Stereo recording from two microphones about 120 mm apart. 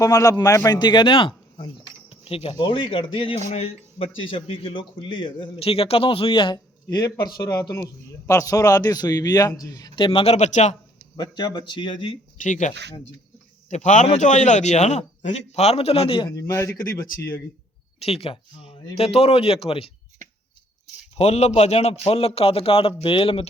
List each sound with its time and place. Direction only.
0.0 s a man's voice: 30° left (ahead or behind)
10.0 s a man's voice: 50° left (ahead or behind); by 10.8 s 80° left
11.2 s a man's voice: 35° left (ahead or behind)
12.4 s a man's voice: 90° left; by 16.3 s 50° left (ahead or behind)
16.3 s speech: 25° left (ahead or behind)
18.0 s speech: 55° left (ahead or behind)
21.2 s a man's voice: 65° left (ahead or behind); by 23.5 s 50° left (ahead or behind)